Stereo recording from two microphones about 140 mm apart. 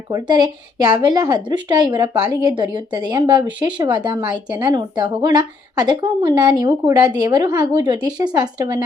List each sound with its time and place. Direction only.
0.1 s speech: 25° right (ahead or behind)